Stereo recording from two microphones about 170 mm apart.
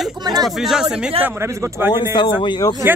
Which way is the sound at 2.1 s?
25° left (ahead or behind).